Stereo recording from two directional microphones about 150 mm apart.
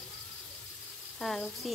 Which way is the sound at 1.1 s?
Centre (ahead or behind).